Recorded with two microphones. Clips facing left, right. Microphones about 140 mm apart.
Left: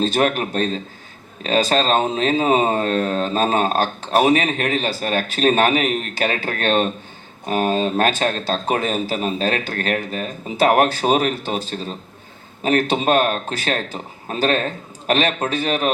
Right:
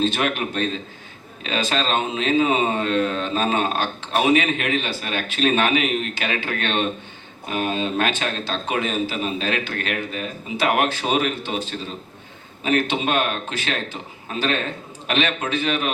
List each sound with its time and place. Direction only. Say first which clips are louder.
0.0 s speech: left 3 dB; 40° left (ahead or behind)